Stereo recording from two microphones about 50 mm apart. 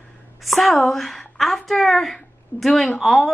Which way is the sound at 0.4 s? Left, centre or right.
Centre.